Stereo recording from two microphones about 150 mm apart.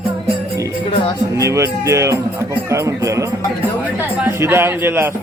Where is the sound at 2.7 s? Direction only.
20° right (ahead or behind).